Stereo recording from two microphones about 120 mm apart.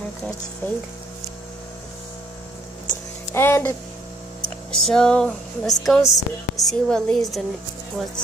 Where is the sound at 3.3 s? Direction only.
20° left (ahead or behind).